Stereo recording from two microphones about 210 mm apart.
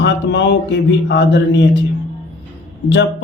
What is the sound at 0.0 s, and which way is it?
Speech, 55° left (ahead or behind).